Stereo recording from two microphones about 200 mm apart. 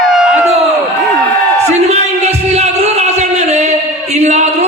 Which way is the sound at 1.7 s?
35° right (ahead or behind).